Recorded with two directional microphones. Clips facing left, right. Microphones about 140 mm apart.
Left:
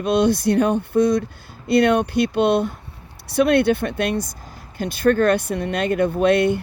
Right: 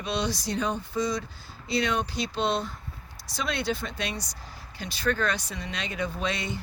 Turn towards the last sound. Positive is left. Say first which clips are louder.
# left 15 dB
turn(degrees=60)  # may be behind; listen again after turning